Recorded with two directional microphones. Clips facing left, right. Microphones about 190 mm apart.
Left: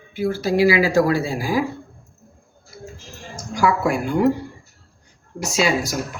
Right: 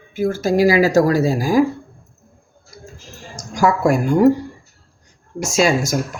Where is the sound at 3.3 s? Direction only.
45° right (ahead or behind).